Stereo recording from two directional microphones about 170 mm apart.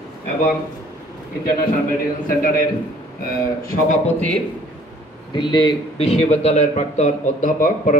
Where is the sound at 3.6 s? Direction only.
45° left (ahead or behind).